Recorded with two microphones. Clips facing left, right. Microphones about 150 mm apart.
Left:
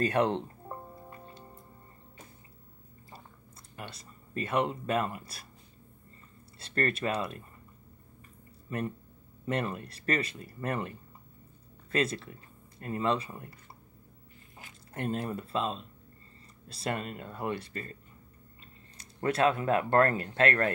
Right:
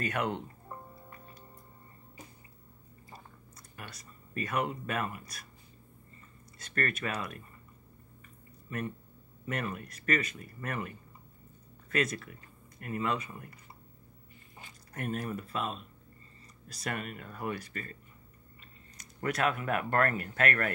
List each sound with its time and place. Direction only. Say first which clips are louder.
0.0 s speech: left 6 dB; 30° left (ahead or behind)
3.7 s speech: left 4 dB; 25° left (ahead or behind)
6.6 s speech: left 4 dB; 30° left (ahead or behind)
8.6 s speech: left 3 dB; 30° left (ahead or behind)
15.0 s speech: left 2 dB; 25° left (ahead or behind)
18.9 s speech: left 4 dB; 25° left (ahead or behind)